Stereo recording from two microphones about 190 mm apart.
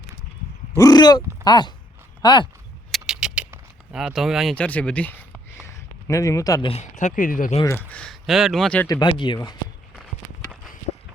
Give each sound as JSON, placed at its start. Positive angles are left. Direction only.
{"t": 0.8, "sound": "speech", "side_deg": 20}
{"t": 2.9, "sound": "a sound", "side_deg": -5}
{"t": 6.1, "sound": "speech", "side_deg": 15}
{"t": 6.7, "sound": "speech", "side_deg": 35}
{"t": 7.6, "sound": "speech", "side_deg": 10}
{"t": 8.9, "sound": "speech", "side_deg": 25}